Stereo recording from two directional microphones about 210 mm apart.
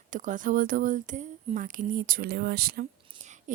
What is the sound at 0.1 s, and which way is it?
Speech, 40° right (ahead or behind).